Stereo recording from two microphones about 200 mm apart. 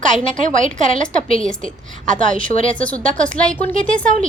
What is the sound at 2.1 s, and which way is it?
Speech, 40° right (ahead or behind).